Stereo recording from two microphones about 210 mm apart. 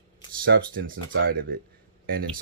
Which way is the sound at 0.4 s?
45° right (ahead or behind).